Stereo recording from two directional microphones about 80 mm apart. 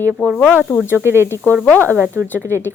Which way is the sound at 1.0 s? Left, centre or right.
Right.